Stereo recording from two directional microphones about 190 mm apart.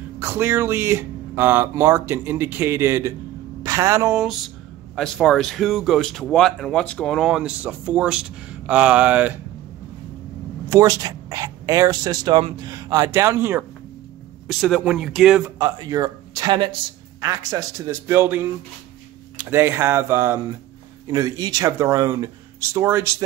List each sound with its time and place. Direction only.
0.2 s speech: 10° right (ahead or behind)
4.9 s speech: centre (ahead or behind)
10.7 s speech: 20° right (ahead or behind)
14.5 s speech: centre (ahead or behind)
15.6 s speech: 20° right (ahead or behind)